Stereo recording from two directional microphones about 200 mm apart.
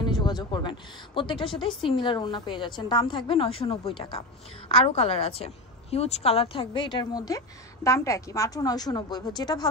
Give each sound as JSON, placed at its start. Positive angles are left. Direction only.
{"t": 0.0, "sound": "a woman's voice", "side_deg": 20}